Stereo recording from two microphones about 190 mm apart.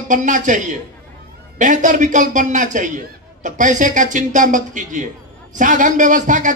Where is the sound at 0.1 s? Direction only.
40° right (ahead or behind).